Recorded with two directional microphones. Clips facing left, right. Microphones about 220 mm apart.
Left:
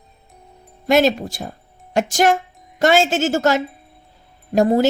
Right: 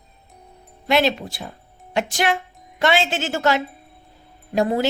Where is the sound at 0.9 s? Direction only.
45° left (ahead or behind).